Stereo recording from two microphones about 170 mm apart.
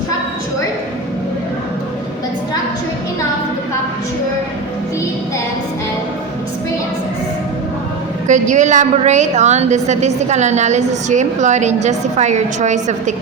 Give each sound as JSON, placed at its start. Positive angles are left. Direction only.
{"t": 8.3, "sound": "a woman's voice", "side_deg": -45}